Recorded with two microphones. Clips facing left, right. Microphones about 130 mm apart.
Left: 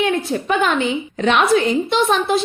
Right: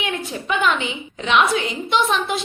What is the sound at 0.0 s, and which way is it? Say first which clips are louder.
A woman's voice: left 8 dB; 40° left (ahead or behind).